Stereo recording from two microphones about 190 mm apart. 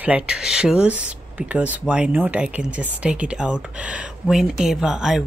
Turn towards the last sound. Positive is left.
turn(degrees=-5)  # may be behind; listen again after turning